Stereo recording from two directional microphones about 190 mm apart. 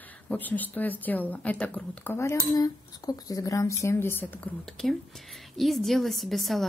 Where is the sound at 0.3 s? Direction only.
10° left (ahead or behind).